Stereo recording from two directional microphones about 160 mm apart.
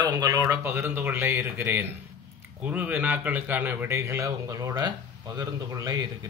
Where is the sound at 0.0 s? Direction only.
25° right (ahead or behind).